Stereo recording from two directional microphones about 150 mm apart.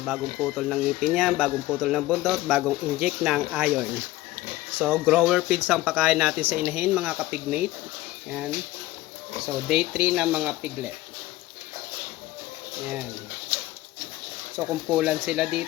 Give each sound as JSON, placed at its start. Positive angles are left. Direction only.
{"t": 0.0, "sound": "speech", "side_deg": 0}
{"t": 6.4, "sound": "speech", "side_deg": -75}
{"t": 6.7, "sound": "speech", "side_deg": -10}
{"t": 9.6, "sound": "speech", "side_deg": -5}
{"t": 14.7, "sound": "speech", "side_deg": -5}